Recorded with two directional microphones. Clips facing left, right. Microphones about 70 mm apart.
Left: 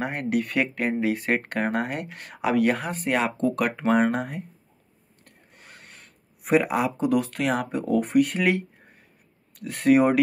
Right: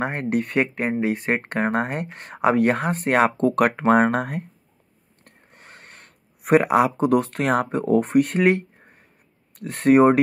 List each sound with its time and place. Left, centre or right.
0.0 s speech: right
5.2 s a sound: right
9.6 s speech: right